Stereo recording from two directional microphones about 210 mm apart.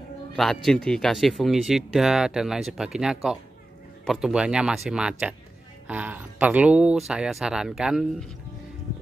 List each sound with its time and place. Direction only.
0.4 s speech: centre (ahead or behind)